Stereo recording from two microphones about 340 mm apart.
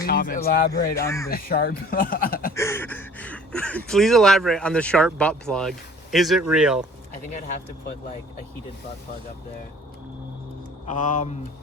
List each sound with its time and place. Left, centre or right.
0.0 s speech: left
1.0 s speech: centre
1.3 s speech: left
2.6 s speech: centre
7.3 s speech: left
10.8 s speech: left